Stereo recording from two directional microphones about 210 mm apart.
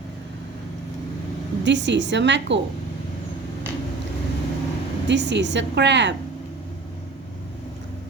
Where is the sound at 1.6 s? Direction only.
55° right (ahead or behind).